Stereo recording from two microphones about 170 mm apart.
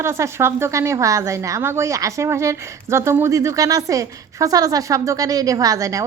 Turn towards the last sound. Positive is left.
turn(degrees=-20)  # may be behind; listen again after turning